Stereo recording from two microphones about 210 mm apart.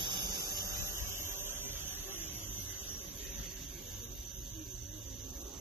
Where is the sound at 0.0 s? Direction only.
20° right (ahead or behind).